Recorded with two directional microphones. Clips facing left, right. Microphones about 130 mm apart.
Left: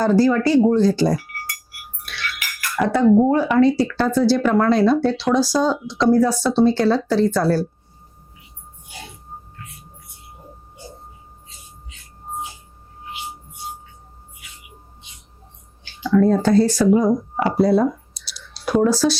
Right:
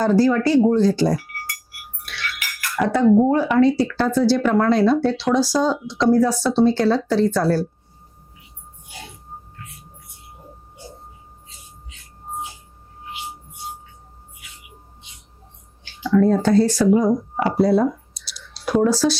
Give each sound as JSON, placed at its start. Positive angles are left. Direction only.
{"t": 0.0, "sound": "speech", "side_deg": 20}
{"t": 8.9, "sound": "music", "side_deg": 20}
{"t": 15.8, "sound": "speech", "side_deg": 20}